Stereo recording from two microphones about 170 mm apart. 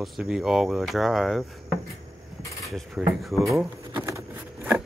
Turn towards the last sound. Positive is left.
turn(degrees=-15)  # may be behind; listen again after turning